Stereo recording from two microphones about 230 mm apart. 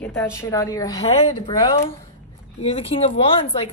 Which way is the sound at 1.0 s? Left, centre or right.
Left.